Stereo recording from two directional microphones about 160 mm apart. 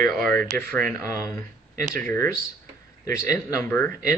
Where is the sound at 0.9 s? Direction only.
20° left (ahead or behind).